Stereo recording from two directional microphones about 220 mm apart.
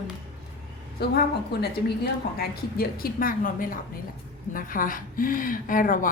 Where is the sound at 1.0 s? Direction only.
50° left (ahead or behind).